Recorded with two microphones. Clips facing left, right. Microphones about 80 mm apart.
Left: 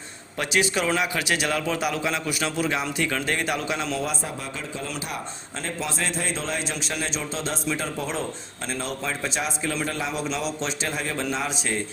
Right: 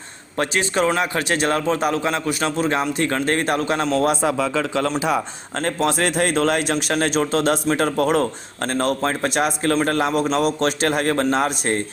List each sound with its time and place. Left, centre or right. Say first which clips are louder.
0.3 s a man's voice: right 4 dB; right
3.9 s speech: right 10 dB; right
5.6 s a man's voice: right 9 dB; right